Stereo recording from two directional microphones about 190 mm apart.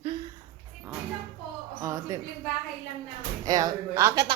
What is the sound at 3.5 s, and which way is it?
Speech, 20° right (ahead or behind).